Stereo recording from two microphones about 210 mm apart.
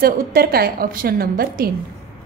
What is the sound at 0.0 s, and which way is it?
A woman's voice, 45° right (ahead or behind).